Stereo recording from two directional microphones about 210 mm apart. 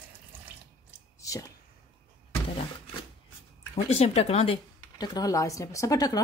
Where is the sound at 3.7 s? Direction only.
30° left (ahead or behind).